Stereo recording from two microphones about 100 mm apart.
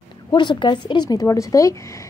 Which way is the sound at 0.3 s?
50° left (ahead or behind).